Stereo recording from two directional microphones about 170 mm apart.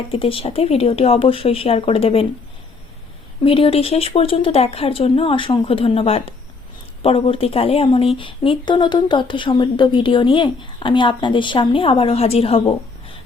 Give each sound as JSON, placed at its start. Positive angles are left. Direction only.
{"t": 0.1, "sound": "speech", "side_deg": 35}
{"t": 3.4, "sound": "a woman's voice", "side_deg": 35}